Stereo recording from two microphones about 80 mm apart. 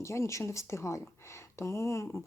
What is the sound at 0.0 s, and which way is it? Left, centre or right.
Speech, left.